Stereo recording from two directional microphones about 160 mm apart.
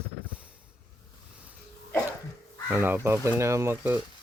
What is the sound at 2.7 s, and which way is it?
Speech, 10° right (ahead or behind).